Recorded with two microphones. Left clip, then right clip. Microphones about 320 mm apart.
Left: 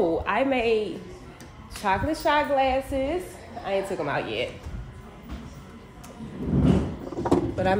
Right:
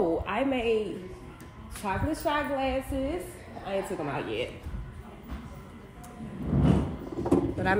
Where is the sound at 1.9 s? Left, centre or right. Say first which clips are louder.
Left 6 dB; centre.